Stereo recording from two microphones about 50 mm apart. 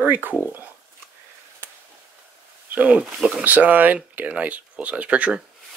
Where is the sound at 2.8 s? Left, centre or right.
Right.